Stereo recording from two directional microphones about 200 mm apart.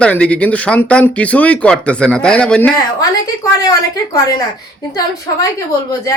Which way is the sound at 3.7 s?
15° left (ahead or behind).